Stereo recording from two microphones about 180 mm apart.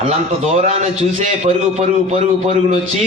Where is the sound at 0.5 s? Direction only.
40° right (ahead or behind).